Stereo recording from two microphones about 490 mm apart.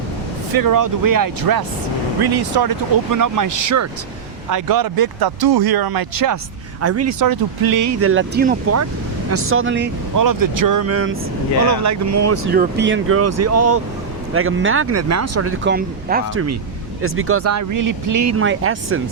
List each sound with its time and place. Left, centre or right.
0.5 s speech: right
10.2 s speech: right
12.5 s speech: right